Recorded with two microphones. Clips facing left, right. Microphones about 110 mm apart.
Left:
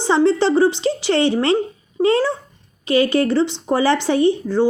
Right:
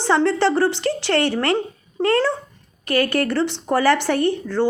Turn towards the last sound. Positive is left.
turn(degrees=15)  # may be behind; listen again after turning